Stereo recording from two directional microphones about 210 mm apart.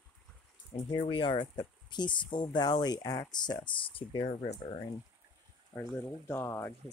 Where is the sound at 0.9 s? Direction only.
25° left (ahead or behind).